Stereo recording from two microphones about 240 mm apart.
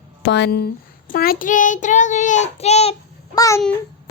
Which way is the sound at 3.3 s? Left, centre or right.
Centre.